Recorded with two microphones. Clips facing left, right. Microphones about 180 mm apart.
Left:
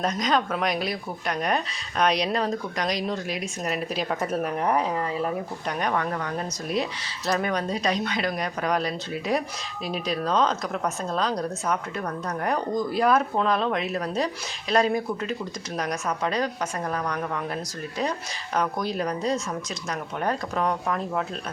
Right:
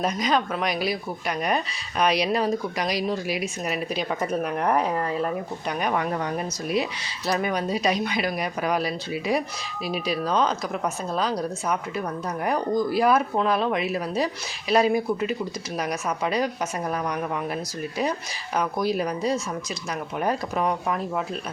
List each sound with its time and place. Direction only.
0.0 s speech: 5° right (ahead or behind)
7.3 s speech: 5° right (ahead or behind)
18.5 s speech: 5° right (ahead or behind)